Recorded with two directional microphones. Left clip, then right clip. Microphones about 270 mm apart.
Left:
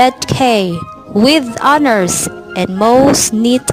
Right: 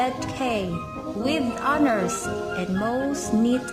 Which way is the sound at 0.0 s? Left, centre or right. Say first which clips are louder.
Left 15 dB; left.